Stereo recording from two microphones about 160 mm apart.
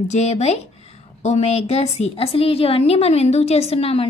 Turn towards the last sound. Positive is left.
turn(degrees=40)  # may be behind; listen again after turning